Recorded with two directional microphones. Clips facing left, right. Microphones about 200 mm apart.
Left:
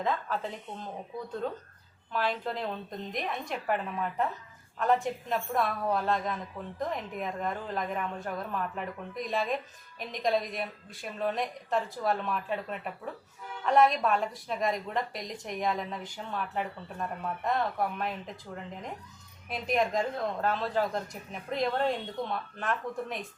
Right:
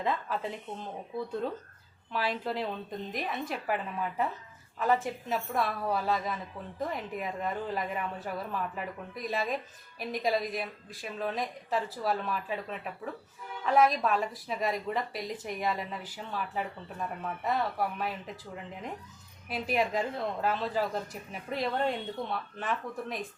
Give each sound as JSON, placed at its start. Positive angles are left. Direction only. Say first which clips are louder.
{"t": 0.0, "sound": "a woman's voice", "louder": "left 1 dB", "side_deg": -5}
{"t": 2.1, "sound": "a woman's voice", "louder": "even", "side_deg": -5}